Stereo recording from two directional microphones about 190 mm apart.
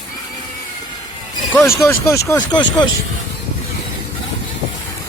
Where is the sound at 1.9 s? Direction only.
15° left (ahead or behind).